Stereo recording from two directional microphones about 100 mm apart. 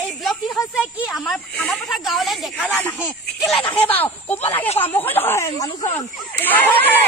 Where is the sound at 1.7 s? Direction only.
Centre (ahead or behind).